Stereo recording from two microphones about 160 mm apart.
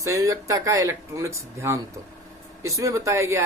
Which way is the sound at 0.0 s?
20° right (ahead or behind).